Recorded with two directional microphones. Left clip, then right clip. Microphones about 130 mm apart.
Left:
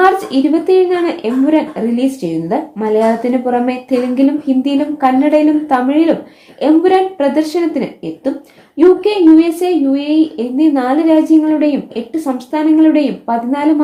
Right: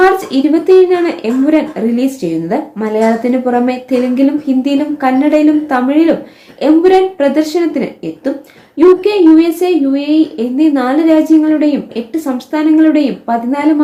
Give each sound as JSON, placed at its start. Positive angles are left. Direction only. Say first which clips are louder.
{"t": 0.0, "sound": "speech", "louder": "right 1 dB", "side_deg": 20}